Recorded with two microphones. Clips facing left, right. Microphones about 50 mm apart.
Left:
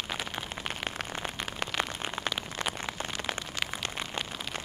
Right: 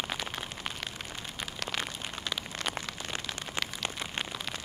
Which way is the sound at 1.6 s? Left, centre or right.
Left.